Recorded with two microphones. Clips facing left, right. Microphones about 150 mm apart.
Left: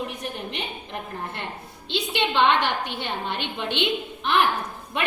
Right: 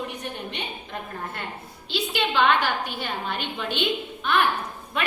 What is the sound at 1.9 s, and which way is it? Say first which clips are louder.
A woman's voice: left 1 dB; 20° left (ahead or behind).